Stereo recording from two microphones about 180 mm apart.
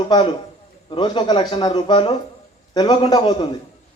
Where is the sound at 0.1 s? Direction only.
25° left (ahead or behind).